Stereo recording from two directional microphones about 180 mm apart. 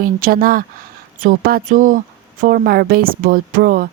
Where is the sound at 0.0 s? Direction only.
55° right (ahead or behind).